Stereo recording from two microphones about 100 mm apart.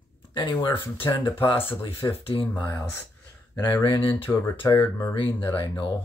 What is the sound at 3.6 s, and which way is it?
Speech, 45° left (ahead or behind).